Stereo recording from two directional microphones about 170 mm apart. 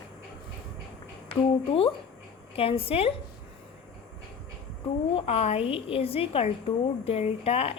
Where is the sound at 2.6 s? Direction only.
35° left (ahead or behind).